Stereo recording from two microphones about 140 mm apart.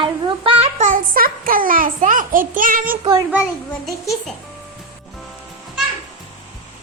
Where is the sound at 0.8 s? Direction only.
80° right.